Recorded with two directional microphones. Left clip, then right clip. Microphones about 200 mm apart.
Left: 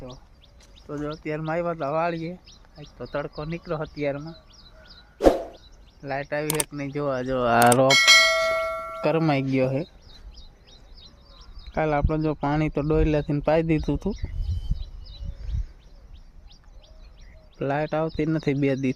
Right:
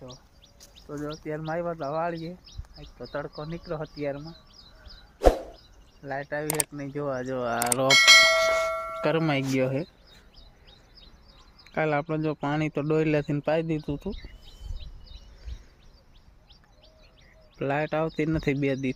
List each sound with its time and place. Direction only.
0.9 s speech: 5° left (ahead or behind)
6.0 s speech: 10° left (ahead or behind)
7.4 s speech: 55° left (ahead or behind)
7.9 s bell: centre (ahead or behind)
10.3 s a sound: 50° right (ahead or behind)
11.7 s a man's voice: 5° right (ahead or behind)
13.4 s a man's voice: 5° left (ahead or behind)
13.7 s speech: 15° left (ahead or behind)
17.6 s a man's voice: 5° right (ahead or behind)